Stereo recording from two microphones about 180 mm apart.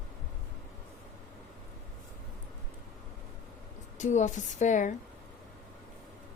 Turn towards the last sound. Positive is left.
turn(degrees=45)  # may be behind; listen again after turning